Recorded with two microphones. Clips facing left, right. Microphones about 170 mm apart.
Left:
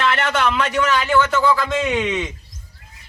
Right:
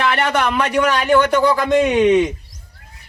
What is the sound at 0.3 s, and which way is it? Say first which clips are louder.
A man's voice: right 2 dB; 15° right (ahead or behind).